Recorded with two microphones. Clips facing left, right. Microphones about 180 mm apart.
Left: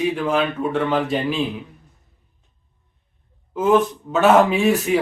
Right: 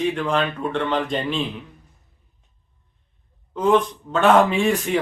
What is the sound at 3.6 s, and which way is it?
Speech, 5° left (ahead or behind).